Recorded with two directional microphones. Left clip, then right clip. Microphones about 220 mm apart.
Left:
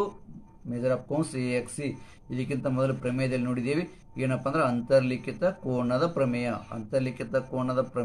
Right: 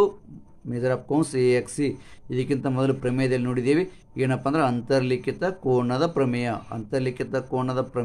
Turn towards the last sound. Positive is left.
turn(degrees=-50)  # may be behind; listen again after turning